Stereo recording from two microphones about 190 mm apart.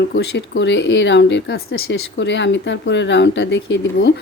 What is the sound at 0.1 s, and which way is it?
Speech, 65° left (ahead or behind).